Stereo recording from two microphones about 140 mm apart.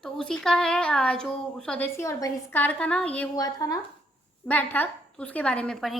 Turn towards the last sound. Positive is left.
turn(degrees=0)  # may be behind; listen again after turning